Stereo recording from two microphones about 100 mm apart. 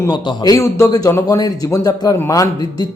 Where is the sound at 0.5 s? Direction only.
30° left (ahead or behind).